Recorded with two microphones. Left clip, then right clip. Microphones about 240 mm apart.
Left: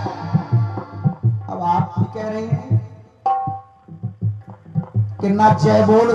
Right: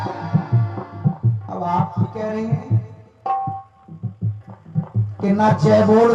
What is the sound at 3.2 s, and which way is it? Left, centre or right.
Tabla, left.